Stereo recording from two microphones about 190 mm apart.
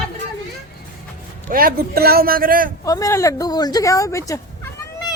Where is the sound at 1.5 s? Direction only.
50° right (ahead or behind).